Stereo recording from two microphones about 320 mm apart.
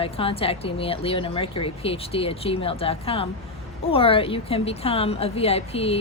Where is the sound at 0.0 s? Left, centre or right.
Centre.